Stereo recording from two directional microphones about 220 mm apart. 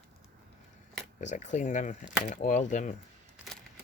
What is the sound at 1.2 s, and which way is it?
Speech, 35° left (ahead or behind).